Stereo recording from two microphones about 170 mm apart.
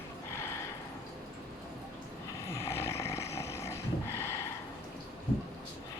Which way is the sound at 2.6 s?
15° left (ahead or behind).